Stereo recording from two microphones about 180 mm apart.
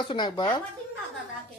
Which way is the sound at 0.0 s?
25° left (ahead or behind).